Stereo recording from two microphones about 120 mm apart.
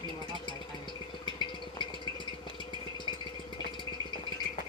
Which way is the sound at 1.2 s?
40° left (ahead or behind).